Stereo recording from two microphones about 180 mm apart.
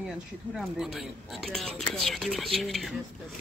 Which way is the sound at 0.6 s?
Centre (ahead or behind).